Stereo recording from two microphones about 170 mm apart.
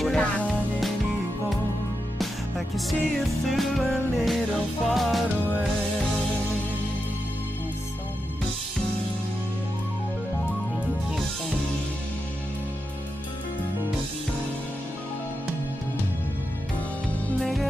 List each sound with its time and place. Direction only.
0.0 s music: 5° left (ahead or behind)
2.1 s music: centre (ahead or behind)
17.2 s music: centre (ahead or behind)